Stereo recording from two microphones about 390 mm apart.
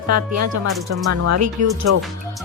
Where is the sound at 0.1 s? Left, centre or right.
Right.